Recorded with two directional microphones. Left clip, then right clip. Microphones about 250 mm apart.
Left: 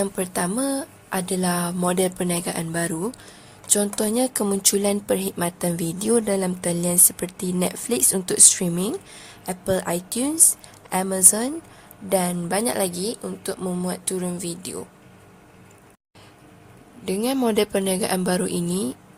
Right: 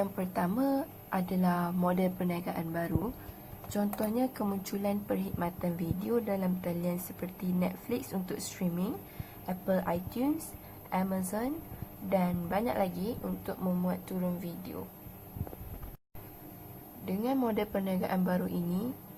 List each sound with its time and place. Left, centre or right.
0.0 s speech: left
17.1 s speech: left